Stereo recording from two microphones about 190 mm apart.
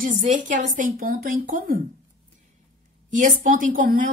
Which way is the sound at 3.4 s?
45° right (ahead or behind).